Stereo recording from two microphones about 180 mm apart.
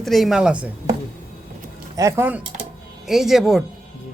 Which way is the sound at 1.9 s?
15° right (ahead or behind).